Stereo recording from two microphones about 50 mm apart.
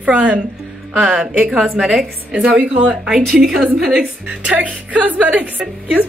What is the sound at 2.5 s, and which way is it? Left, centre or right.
Speech, centre.